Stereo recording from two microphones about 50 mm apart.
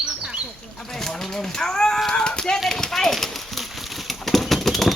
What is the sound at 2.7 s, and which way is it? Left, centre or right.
Clip-clop, centre.